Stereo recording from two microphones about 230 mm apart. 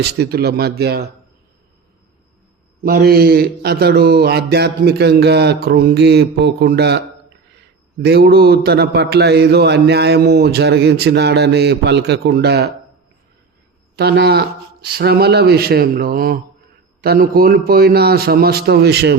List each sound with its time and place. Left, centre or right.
0.0 s a man's voice: right
2.8 s a man's voice: right
8.0 s a man's voice: right
13.9 s a man's voice: right